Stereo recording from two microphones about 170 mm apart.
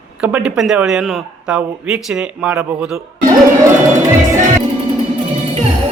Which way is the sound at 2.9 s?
15° right (ahead or behind).